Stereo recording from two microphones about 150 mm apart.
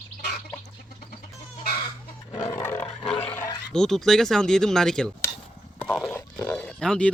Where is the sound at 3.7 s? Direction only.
5° left (ahead or behind).